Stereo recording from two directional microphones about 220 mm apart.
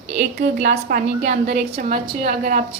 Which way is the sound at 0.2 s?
30° right (ahead or behind).